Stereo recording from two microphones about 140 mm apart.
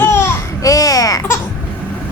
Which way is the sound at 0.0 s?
15° left (ahead or behind).